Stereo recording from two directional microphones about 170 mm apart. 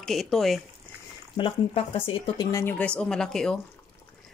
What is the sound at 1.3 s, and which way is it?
Speech, 35° left (ahead or behind).